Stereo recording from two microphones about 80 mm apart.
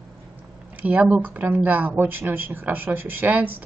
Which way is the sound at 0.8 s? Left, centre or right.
Centre.